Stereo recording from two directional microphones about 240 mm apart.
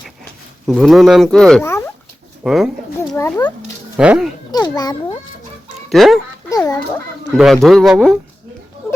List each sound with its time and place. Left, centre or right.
0.7 s speech: centre
2.4 s speech: centre
3.2 s a child's voice: centre
3.9 s speech: centre
4.5 s a child's voice: centre
5.9 s speech: centre
6.5 s a child's voice: centre
7.3 s speech: centre